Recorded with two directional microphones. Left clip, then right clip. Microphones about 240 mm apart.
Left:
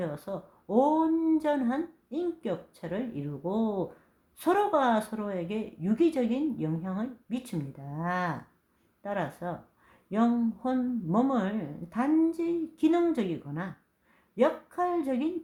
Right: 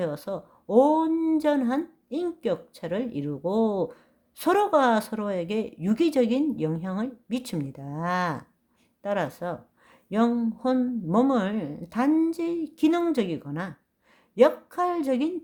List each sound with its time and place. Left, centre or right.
0.0 s speech: right